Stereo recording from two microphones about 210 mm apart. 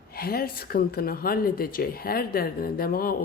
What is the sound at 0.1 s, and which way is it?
Speech, 45° left (ahead or behind).